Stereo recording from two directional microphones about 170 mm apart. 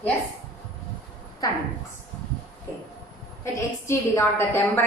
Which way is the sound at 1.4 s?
20° left (ahead or behind).